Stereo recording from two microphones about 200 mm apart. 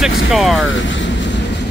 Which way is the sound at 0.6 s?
70° left (ahead or behind).